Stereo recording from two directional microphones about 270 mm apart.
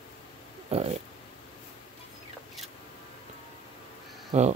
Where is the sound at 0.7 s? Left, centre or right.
Right.